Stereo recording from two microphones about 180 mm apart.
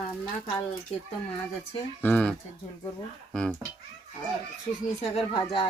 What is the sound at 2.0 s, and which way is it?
Speech, 5° left (ahead or behind).